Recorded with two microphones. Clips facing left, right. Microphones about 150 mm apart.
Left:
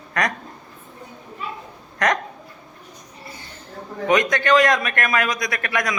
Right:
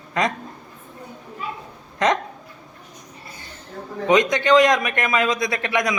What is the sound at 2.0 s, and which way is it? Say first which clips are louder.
Speech: right 2 dB; 20° right (ahead or behind).